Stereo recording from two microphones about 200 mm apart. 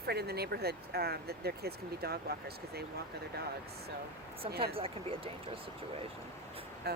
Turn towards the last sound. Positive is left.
turn(degrees=-50)  # may be behind; listen again after turning